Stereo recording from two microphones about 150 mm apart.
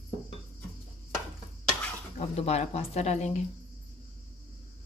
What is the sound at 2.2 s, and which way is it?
Speech, 45° left (ahead or behind).